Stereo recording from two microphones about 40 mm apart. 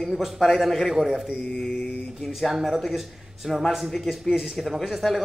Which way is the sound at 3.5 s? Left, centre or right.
Centre.